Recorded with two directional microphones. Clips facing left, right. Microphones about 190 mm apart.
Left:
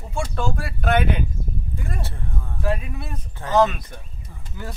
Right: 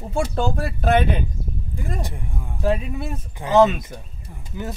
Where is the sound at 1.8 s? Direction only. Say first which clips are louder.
Right 6 dB; 15° right (ahead or behind).